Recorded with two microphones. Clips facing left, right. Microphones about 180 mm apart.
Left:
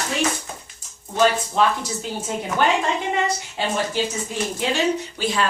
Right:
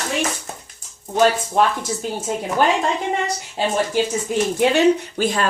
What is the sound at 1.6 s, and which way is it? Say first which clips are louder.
Speech: right 2 dB; 55° right (ahead or behind).